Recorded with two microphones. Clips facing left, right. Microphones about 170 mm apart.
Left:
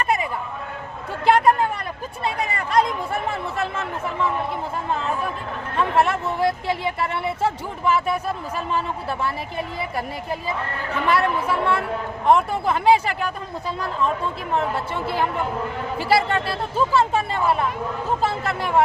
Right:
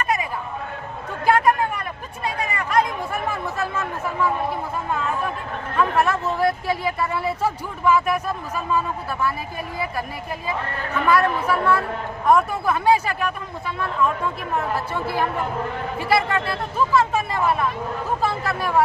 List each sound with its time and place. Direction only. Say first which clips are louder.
1.2 s a sound: left 1 dB; 30° left (ahead or behind)
2.5 s speech: even; 30° left (ahead or behind)
5.7 s speech: even; 25° left (ahead or behind)
11.1 s speech: right 2 dB; 25° left (ahead or behind)
16.0 s speech: left 1 dB; 30° left (ahead or behind)